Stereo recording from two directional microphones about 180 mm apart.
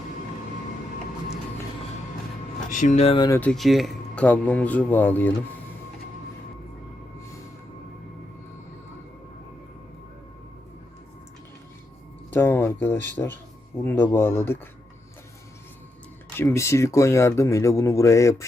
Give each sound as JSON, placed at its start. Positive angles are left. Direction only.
{"t": 2.6, "sound": "speech", "side_deg": 45}
{"t": 3.2, "sound": "speech", "side_deg": 15}
{"t": 3.5, "sound": "speech", "side_deg": 0}
{"t": 12.3, "sound": "speech", "side_deg": 10}
{"t": 16.4, "sound": "speech", "side_deg": 15}